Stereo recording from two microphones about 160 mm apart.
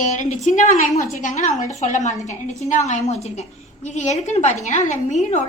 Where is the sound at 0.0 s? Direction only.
50° left (ahead or behind).